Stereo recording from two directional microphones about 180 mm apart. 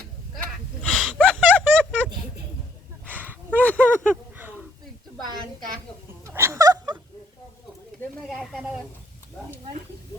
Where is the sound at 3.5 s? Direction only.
10° left (ahead or behind).